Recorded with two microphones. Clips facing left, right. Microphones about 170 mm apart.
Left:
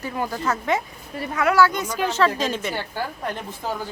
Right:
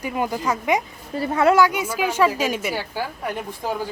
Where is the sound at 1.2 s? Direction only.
30° right (ahead or behind).